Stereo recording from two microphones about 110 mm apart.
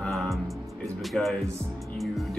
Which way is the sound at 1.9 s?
Centre (ahead or behind).